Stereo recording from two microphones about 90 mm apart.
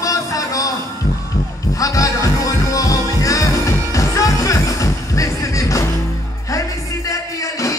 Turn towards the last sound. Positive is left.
turn(degrees=35)  # may be behind; listen again after turning